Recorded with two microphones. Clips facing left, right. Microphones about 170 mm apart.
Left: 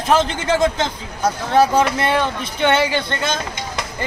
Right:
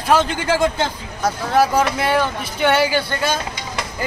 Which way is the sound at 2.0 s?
5° right (ahead or behind).